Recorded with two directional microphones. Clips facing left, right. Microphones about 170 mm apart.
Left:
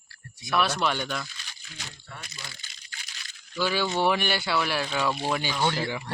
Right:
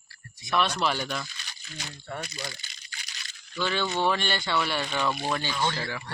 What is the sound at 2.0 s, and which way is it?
Speech, 65° right (ahead or behind).